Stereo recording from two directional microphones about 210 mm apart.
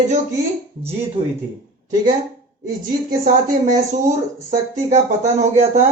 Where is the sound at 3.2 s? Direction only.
40° right (ahead or behind).